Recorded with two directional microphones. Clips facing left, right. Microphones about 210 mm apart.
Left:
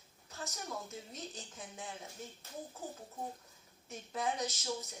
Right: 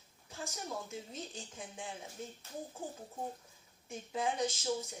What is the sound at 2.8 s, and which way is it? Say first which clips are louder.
Speech: right 1 dB; 30° right (ahead or behind).